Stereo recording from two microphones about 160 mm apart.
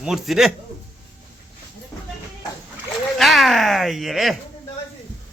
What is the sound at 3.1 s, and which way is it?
A man's voice, centre (ahead or behind).